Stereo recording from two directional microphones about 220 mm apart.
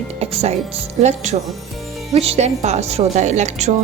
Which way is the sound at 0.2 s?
30° right (ahead or behind).